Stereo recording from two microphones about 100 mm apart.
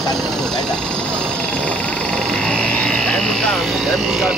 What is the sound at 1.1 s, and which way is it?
Frog, 10° left (ahead or behind).